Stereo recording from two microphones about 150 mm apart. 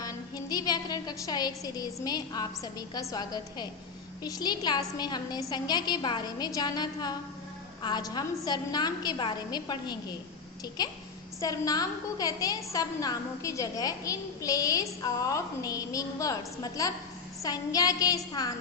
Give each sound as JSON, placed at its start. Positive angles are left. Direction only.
{"t": 0.0, "sound": "a woman's voice", "side_deg": 25}